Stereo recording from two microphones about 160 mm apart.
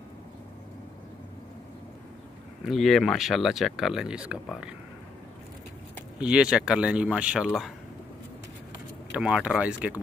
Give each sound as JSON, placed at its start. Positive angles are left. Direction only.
{"t": 2.6, "sound": "speech", "side_deg": 0}
{"t": 6.1, "sound": "speech", "side_deg": -5}
{"t": 9.1, "sound": "speech", "side_deg": -5}